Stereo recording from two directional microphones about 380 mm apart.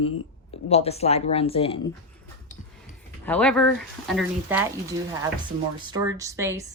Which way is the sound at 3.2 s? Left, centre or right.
Centre.